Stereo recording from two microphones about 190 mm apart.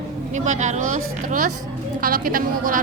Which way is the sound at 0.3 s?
40° right (ahead or behind).